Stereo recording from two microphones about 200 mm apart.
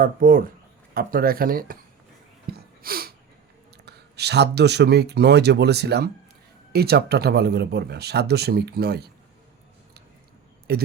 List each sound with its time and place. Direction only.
0.0 s speech: 45° right (ahead or behind)
2.5 s a sound: 50° right (ahead or behind)
3.8 s speech: 55° right (ahead or behind)
10.7 s speech: 50° right (ahead or behind)